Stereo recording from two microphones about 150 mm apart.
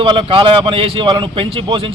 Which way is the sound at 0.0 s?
35° right (ahead or behind).